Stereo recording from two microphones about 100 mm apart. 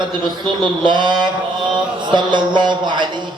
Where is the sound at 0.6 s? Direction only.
50° right (ahead or behind).